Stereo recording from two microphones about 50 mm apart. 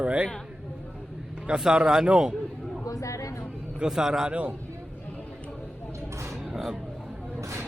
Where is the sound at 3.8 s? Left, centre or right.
Centre.